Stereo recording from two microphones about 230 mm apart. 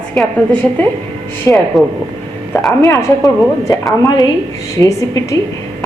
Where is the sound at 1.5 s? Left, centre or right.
Centre.